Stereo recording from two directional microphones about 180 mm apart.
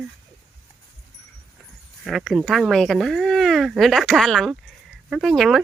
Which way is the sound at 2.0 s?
Centre (ahead or behind).